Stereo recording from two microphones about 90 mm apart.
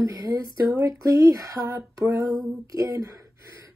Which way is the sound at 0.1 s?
40° right (ahead or behind).